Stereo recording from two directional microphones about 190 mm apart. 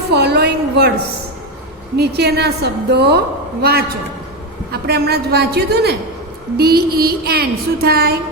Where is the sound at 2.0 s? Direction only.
60° right (ahead or behind).